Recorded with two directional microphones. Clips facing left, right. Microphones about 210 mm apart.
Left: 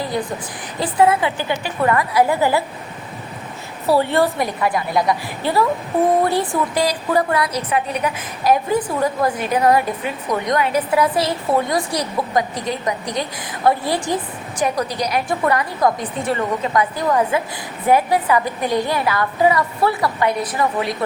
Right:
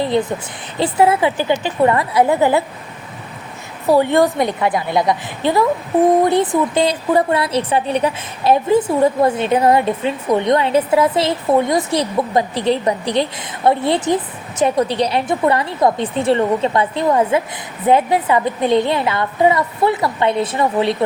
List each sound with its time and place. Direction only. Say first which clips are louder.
0.0 s a woman's voice: right 6 dB; 25° right (ahead or behind)
3.8 s a woman's voice: right 3 dB; 15° right (ahead or behind)